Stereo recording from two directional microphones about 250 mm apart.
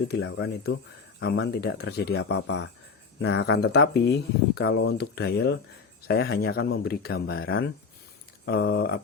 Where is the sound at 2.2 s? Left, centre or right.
Left.